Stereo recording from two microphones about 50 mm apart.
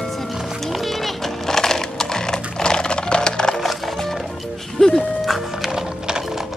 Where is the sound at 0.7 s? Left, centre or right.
Centre.